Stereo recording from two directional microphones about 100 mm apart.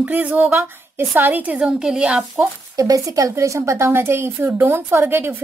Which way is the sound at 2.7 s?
35° right (ahead or behind).